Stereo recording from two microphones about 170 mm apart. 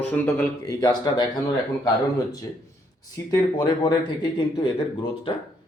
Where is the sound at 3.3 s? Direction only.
25° left (ahead or behind).